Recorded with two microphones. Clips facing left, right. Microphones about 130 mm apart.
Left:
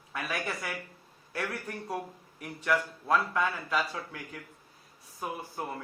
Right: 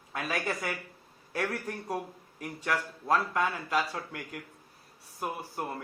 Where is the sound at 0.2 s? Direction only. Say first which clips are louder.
Right 2 dB; 20° right (ahead or behind).